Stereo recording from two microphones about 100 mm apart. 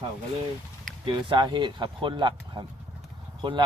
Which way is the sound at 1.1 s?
55° right (ahead or behind).